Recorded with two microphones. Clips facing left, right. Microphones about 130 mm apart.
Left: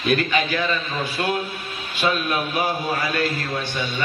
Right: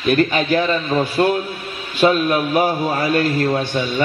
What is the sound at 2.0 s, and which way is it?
Speech, 40° right (ahead or behind).